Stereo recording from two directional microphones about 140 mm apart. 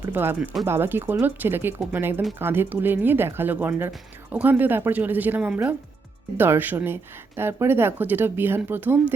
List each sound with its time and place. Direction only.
0.1 s speech: 15° right (ahead or behind)
0.3 s speech: 5° right (ahead or behind)
0.6 s speech: 15° right (ahead or behind)